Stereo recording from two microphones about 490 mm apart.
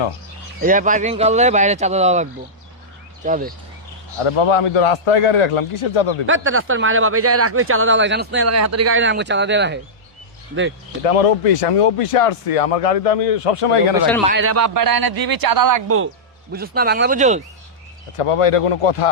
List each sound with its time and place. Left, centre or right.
0.6 s speech: centre
3.2 s speech: centre
4.2 s a man's voice: left
6.2 s speech: right
11.3 s speech: left
14.3 s a man's voice: right
16.5 s speech: centre
18.2 s speech: left